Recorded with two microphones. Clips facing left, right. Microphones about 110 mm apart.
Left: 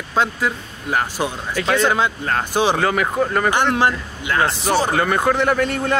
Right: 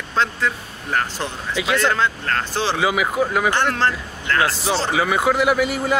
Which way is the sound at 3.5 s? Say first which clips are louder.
Left 2 dB; 15° left (ahead or behind).